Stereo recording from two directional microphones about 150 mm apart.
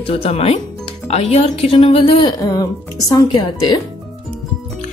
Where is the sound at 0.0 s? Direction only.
40° left (ahead or behind).